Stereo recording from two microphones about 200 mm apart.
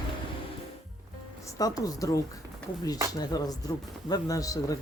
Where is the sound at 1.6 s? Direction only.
20° left (ahead or behind).